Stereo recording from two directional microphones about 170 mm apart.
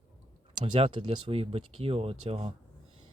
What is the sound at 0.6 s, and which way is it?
Speech, 35° right (ahead or behind).